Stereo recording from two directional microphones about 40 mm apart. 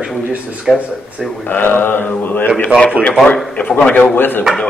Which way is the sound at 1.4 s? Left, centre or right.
Left.